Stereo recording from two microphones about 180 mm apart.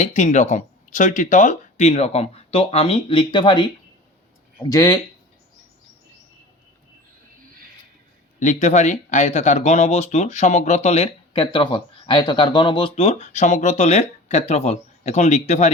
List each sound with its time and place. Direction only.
0.0 s speech: 40° left (ahead or behind); by 3.7 s 25° left (ahead or behind)
4.7 s speech: 20° left (ahead or behind)
8.4 s speech: 40° left (ahead or behind)